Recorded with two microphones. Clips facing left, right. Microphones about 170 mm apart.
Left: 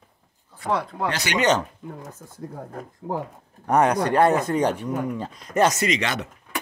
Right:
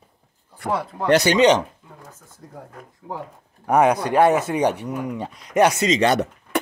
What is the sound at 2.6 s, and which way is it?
Speech, 45° left (ahead or behind).